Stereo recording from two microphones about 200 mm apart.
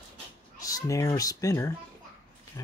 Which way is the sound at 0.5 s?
15° left (ahead or behind).